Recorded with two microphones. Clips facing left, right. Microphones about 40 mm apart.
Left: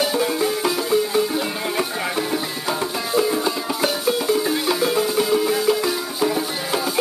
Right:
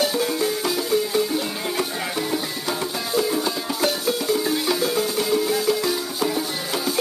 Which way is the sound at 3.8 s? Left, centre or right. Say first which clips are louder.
Left 2 dB; centre.